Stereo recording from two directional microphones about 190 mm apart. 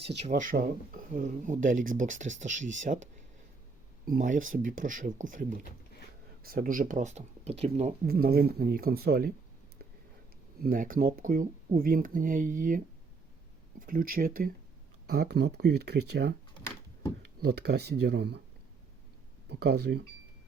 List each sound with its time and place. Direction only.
0.2 s speech: 40° right (ahead or behind)
8.0 s speech: 55° right (ahead or behind)
10.6 s speech: 45° right (ahead or behind)
17.4 s speech: 60° right (ahead or behind)
19.5 s speech: 60° right (ahead or behind)